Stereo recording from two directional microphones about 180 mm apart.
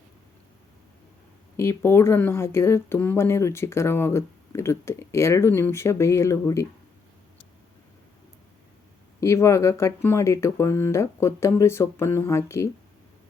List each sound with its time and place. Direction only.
1.5 s speech: 15° left (ahead or behind)
9.2 s speech: 15° left (ahead or behind)